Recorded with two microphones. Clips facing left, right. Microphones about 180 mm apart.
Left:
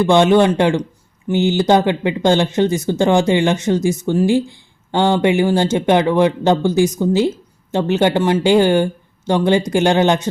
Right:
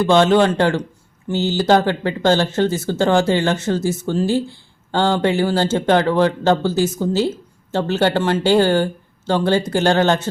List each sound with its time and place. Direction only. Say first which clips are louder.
0.0 s speech: left 2 dB; 15° left (ahead or behind)